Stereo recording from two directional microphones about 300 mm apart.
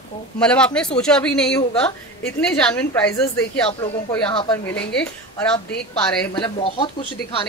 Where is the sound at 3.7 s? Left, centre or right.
Centre.